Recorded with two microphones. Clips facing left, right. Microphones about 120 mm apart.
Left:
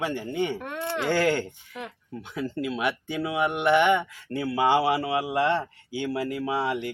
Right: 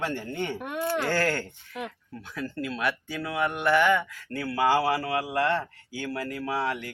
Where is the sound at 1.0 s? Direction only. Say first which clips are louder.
Left 3 dB; 20° left (ahead or behind).